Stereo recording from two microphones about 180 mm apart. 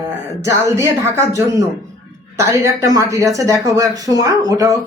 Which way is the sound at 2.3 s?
15° right (ahead or behind).